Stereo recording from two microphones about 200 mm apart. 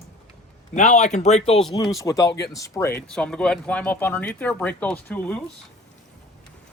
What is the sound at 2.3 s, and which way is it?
Speech, 55° left (ahead or behind).